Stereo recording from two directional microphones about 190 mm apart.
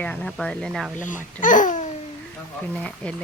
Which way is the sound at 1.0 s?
40° left (ahead or behind).